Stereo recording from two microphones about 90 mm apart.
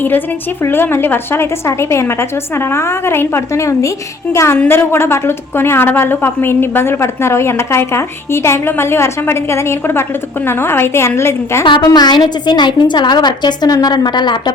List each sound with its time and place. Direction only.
0.6 s a woman's voice: 25° left (ahead or behind)
4.5 s a woman's voice: 20° left (ahead or behind)
11.8 s a woman's voice: 50° left (ahead or behind)